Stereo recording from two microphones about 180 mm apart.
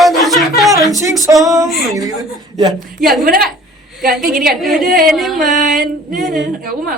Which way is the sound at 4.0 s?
55° right (ahead or behind).